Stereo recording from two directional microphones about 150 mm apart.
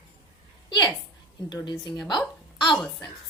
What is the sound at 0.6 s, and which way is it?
A woman's voice, 30° left (ahead or behind).